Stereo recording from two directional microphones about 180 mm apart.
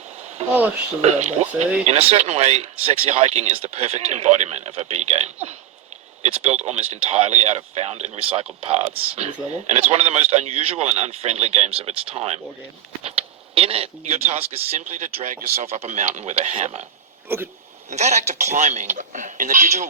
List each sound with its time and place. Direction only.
0.4 s speech: 35° right (ahead or behind)
6.5 s speech: 35° right (ahead or behind)
17.2 s speech: 10° right (ahead or behind)
17.9 s speech: 40° right (ahead or behind)